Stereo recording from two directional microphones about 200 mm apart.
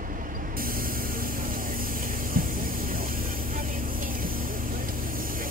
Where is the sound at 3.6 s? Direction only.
45° right (ahead or behind).